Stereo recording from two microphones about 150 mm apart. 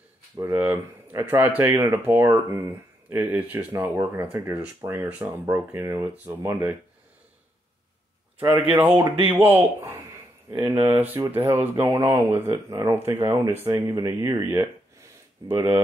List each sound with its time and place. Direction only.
0.4 s speech: 15° right (ahead or behind)
8.4 s speech: 10° right (ahead or behind)
14.5 s a sound: 20° right (ahead or behind)